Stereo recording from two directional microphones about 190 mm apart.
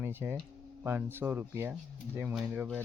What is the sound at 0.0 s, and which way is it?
Speech, 10° right (ahead or behind).